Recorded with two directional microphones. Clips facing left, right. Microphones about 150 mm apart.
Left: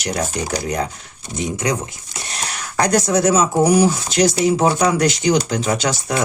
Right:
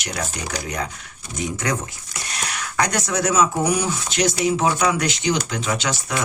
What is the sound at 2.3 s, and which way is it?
Speech, 30° left (ahead or behind).